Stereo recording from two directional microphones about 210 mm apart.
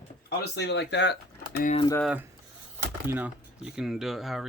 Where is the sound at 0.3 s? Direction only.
55° left (ahead or behind).